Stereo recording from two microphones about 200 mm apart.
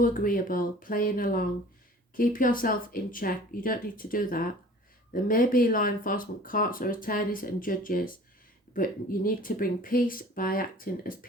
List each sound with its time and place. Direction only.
0.0 s speech: 45° left (ahead or behind)